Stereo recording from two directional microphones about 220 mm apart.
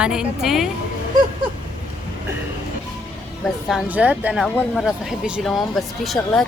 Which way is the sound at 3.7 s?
5° right (ahead or behind).